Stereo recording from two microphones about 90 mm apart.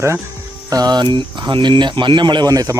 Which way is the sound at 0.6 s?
45° right (ahead or behind).